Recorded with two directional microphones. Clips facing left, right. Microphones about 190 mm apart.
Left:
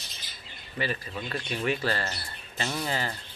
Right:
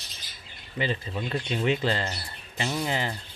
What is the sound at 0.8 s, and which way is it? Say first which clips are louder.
Speech: right 3 dB; 20° right (ahead or behind).